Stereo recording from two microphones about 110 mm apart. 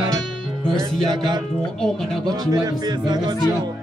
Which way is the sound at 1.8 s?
5° left (ahead or behind).